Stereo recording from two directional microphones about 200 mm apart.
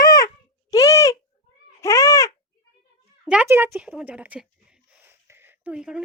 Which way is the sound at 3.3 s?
10° right (ahead or behind).